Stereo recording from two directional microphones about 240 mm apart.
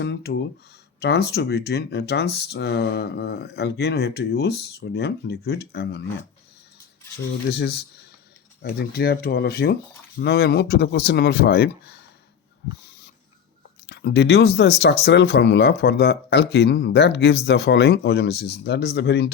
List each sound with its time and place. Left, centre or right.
0.0 s speech: left
7.5 s speech: left
13.8 s speech: left